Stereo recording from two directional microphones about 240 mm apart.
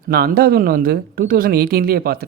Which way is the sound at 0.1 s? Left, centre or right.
Right.